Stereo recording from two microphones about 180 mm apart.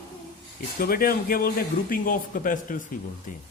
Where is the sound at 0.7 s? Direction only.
55° left (ahead or behind).